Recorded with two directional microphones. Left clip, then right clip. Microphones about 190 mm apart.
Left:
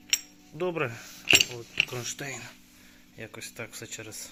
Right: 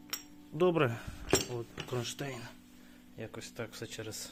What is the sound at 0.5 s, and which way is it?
Speech, 30° right (ahead or behind).